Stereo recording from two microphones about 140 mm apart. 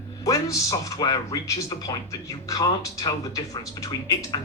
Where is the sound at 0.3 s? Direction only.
25° left (ahead or behind).